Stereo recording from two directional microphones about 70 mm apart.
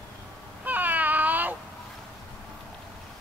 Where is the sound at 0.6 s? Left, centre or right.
Right.